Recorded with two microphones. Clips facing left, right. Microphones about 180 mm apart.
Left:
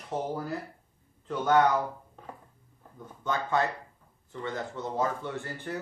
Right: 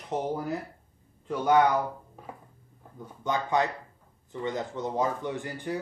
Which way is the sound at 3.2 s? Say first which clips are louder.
Right 1 dB; 15° right (ahead or behind).